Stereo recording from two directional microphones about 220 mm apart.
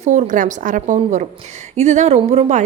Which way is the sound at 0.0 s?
35° right (ahead or behind).